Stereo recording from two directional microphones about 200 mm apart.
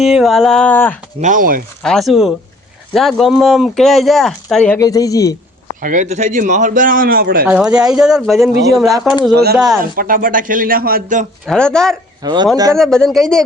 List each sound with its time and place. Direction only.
0.0 s speech: centre (ahead or behind)
1.2 s speech: 40° right (ahead or behind)
1.8 s speech: centre (ahead or behind); by 5.4 s 15° left (ahead or behind)
5.8 s a man's voice: 40° right (ahead or behind)
7.4 s speech: 5° right (ahead or behind)
9.3 s speech: 55° right (ahead or behind)
9.6 s speech: centre (ahead or behind)
9.8 s speech: 45° right (ahead or behind)
11.4 s speech: 5° left (ahead or behind)
12.2 s speech: 20° right (ahead or behind)
12.7 s speech: 5° left (ahead or behind)